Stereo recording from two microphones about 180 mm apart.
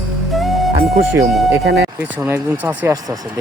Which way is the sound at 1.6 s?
70° right (ahead or behind).